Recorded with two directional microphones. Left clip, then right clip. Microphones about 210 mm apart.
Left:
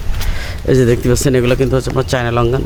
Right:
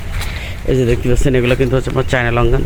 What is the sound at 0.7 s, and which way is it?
Speech, 20° left (ahead or behind).